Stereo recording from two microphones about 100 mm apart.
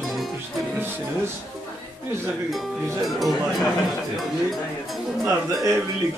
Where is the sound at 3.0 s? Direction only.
Centre (ahead or behind).